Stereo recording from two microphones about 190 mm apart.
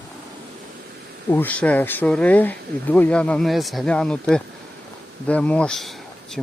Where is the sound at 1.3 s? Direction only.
10° left (ahead or behind).